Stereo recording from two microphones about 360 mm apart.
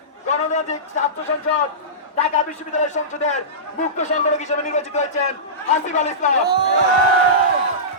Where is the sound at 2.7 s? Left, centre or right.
Centre.